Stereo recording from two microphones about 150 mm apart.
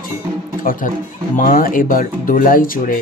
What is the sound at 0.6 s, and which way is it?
Speech, 65° left (ahead or behind).